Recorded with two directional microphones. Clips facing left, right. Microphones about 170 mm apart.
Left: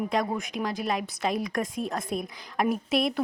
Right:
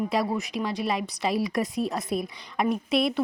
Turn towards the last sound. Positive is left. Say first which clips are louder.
# right 2 dB
turn(degrees=0)  # may be behind; listen again after turning